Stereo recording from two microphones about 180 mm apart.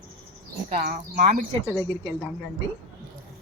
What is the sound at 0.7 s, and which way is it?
Speech, 50° right (ahead or behind).